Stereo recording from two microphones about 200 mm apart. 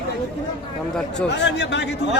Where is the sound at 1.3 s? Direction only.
60° left (ahead or behind).